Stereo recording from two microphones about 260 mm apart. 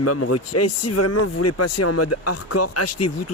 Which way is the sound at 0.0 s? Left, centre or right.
Left.